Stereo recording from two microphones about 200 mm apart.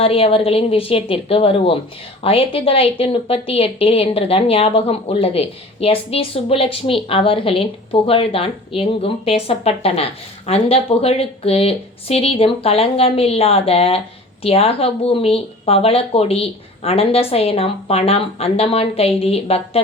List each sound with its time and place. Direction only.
0.0 s a woman's voice: 30° left (ahead or behind)